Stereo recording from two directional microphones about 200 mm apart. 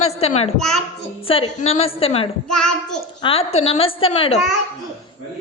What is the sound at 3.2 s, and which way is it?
A woman's voice, 30° left (ahead or behind).